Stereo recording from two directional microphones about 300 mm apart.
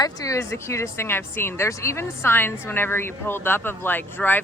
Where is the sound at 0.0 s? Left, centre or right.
Centre.